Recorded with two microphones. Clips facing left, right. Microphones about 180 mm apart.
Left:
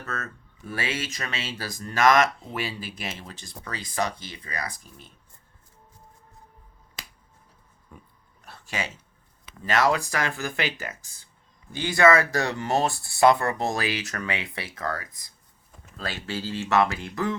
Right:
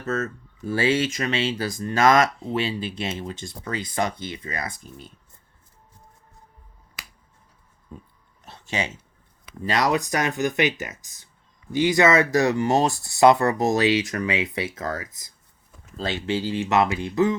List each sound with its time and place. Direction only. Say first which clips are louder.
0.0 s speech: right 9 dB; 25° right (ahead or behind)
8.4 s a sound: right 4 dB; 20° right (ahead or behind)
9.6 s speech: right 1 dB; 20° right (ahead or behind)